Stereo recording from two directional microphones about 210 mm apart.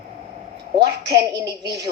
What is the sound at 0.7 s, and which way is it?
Speech, 50° right (ahead or behind).